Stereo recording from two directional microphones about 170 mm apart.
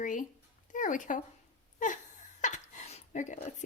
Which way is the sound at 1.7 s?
45° left (ahead or behind).